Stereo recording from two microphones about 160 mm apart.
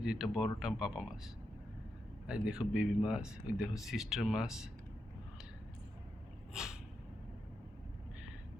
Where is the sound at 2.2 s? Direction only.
5° right (ahead or behind).